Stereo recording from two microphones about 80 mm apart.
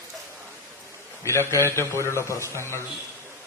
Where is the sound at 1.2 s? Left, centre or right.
Left.